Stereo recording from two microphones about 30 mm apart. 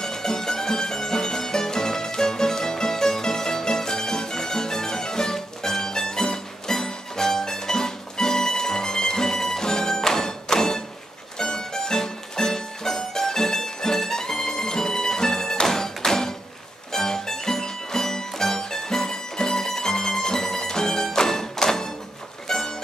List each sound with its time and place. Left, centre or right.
0.0 s music: centre